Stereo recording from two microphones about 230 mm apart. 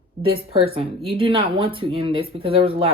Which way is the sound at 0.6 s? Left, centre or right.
Right.